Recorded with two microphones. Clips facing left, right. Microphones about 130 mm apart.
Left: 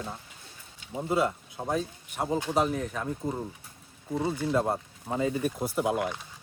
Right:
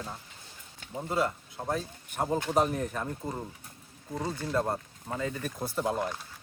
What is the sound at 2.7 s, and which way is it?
Speech, 5° right (ahead or behind).